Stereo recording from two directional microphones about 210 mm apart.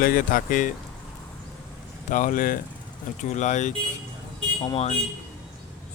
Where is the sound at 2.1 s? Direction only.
40° left (ahead or behind).